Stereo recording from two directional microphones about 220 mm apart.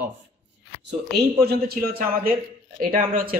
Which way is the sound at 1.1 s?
45° right (ahead or behind).